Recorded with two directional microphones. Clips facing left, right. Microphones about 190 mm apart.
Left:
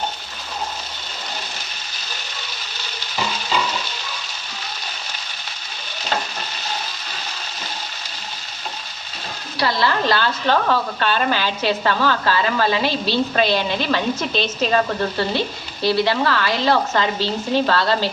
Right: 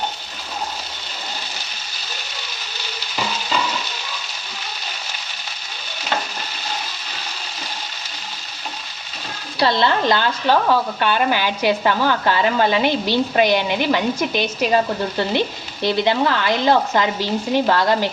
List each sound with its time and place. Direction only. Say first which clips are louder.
9.6 s speech: right 2 dB; 20° right (ahead or behind)